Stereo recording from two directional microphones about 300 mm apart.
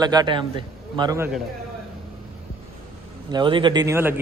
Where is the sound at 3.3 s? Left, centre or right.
Centre.